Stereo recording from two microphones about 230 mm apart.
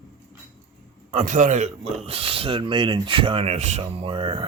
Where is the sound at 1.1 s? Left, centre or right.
Right.